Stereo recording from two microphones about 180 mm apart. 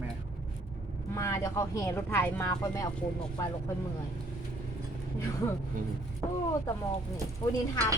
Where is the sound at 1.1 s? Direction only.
15° left (ahead or behind).